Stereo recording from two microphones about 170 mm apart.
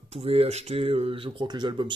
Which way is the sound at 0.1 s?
35° right (ahead or behind).